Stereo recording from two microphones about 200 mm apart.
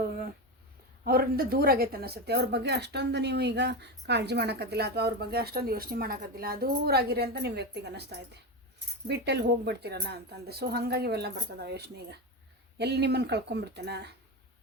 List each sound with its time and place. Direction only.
1.0 s a woman's voice: 50° right (ahead or behind)